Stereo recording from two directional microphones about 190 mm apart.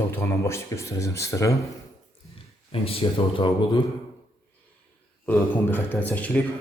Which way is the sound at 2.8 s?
30° left (ahead or behind).